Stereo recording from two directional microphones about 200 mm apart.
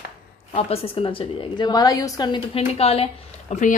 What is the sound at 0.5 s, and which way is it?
A woman's voice, 30° left (ahead or behind).